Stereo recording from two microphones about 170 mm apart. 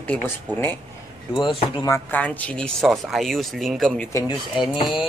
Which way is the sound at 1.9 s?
10° left (ahead or behind).